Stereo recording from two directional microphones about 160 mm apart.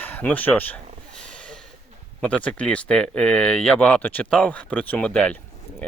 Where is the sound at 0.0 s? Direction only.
10° left (ahead or behind).